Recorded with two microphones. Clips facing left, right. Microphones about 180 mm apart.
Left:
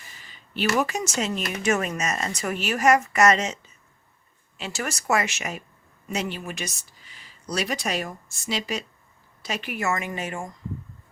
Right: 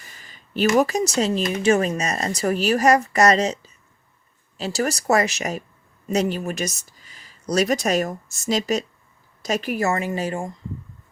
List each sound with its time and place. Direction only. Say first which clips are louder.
0.3 s speech: right 6 dB; 40° right (ahead or behind)